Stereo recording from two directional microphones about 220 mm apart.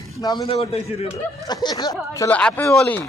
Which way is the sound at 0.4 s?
25° left (ahead or behind).